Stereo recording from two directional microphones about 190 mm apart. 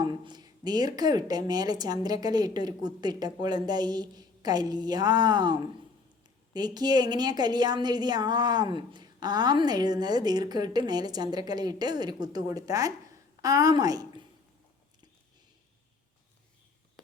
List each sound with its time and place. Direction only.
0.0 s a woman's voice: 20° right (ahead or behind)